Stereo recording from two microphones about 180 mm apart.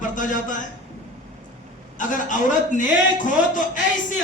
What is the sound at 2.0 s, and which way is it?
A man's voice, 45° left (ahead or behind).